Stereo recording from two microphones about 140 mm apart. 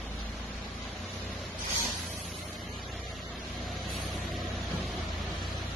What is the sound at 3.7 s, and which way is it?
Vehicle, centre (ahead or behind).